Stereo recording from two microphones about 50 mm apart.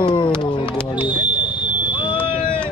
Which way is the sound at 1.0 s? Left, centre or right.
Right.